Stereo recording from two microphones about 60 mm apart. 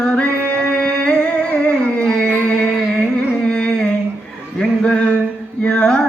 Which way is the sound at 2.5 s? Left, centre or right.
Centre.